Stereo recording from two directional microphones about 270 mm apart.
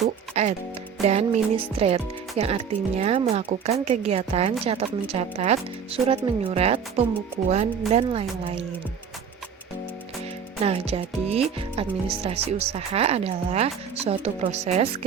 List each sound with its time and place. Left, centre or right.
0.4 s speech: right
10.6 s speech: right